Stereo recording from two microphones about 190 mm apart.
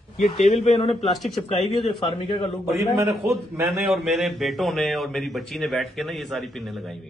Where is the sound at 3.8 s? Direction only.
Centre (ahead or behind).